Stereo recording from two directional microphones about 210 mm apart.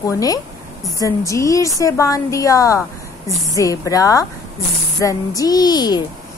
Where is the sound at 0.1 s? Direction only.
15° left (ahead or behind).